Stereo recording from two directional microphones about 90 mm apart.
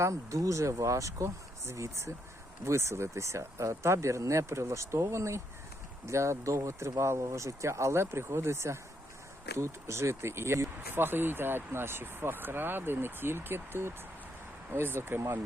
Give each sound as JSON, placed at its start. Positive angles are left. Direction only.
{"t": 0.0, "sound": "speech", "side_deg": -35}